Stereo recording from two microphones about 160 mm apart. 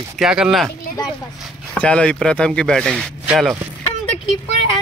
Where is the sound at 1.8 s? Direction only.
5° left (ahead or behind).